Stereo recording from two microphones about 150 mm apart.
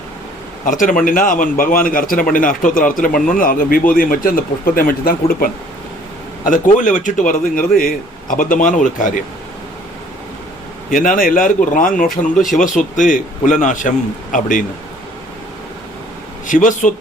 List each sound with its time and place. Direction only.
0.6 s a man's voice: 60° left (ahead or behind); by 5.5 s 80° left
6.4 s a man's voice: 60° left (ahead or behind)
10.9 s a man's voice: 65° left (ahead or behind)
16.5 s a man's voice: 60° left (ahead or behind)